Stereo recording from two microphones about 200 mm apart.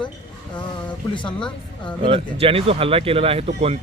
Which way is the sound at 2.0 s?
25° right (ahead or behind).